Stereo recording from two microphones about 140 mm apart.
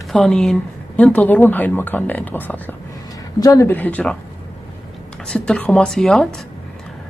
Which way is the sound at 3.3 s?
25° left (ahead or behind).